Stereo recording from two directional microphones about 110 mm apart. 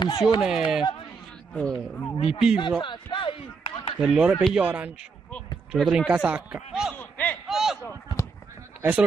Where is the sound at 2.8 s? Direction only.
50° left (ahead or behind).